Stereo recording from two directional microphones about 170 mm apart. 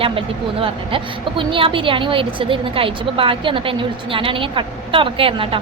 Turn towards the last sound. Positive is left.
turn(degrees=-30)  # may be behind; listen again after turning